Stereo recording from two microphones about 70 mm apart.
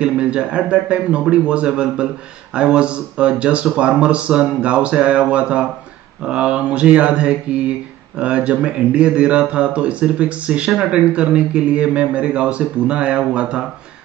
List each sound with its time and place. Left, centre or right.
0.0 s speech: centre